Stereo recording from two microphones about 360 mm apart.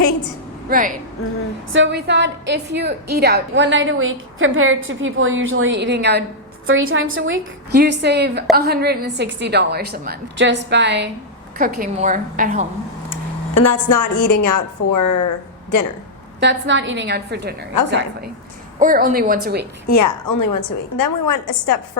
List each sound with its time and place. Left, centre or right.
0.7 s a woman's voice: right
13.1 s a woman's voice: left
16.4 s a woman's voice: right
18.8 s a woman's voice: right
19.9 s a woman's voice: left